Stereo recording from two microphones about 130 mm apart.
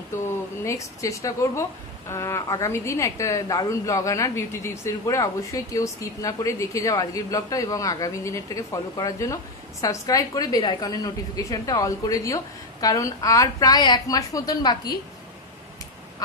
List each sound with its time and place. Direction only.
0.1 s speech: 20° left (ahead or behind)